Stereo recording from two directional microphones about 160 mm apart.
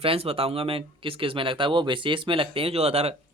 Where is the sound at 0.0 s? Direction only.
35° right (ahead or behind).